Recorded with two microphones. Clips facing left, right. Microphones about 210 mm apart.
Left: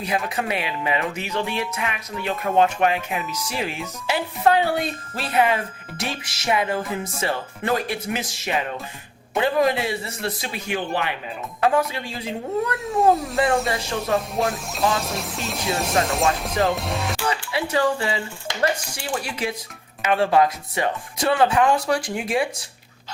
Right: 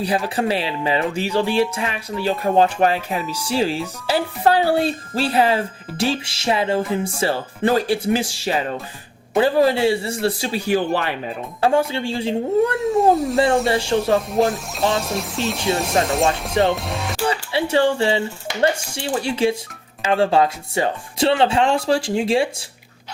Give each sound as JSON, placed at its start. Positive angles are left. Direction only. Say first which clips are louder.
{"t": 0.3, "sound": "speech", "louder": "right 5 dB", "side_deg": -30}
{"t": 13.0, "sound": "speech", "louder": "right 2 dB", "side_deg": 0}
{"t": 13.3, "sound": "speech", "louder": "right 4 dB", "side_deg": -30}
{"t": 14.0, "sound": "speech", "louder": "right 5 dB", "side_deg": 0}
{"t": 17.2, "sound": "speech", "louder": "right 4 dB", "side_deg": -30}